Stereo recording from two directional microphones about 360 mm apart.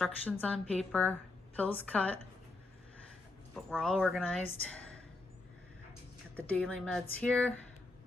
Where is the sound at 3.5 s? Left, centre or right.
Centre.